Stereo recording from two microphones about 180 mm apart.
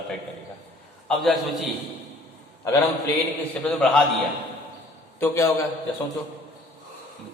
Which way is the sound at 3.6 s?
5° left (ahead or behind).